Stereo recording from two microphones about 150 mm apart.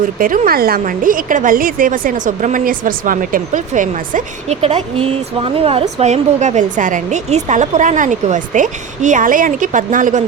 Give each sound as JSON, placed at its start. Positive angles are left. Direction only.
{"t": 0.2, "sound": "a woman's voice", "side_deg": -70}
{"t": 4.6, "sound": "speech", "side_deg": -45}
{"t": 6.0, "sound": "a woman's voice", "side_deg": -50}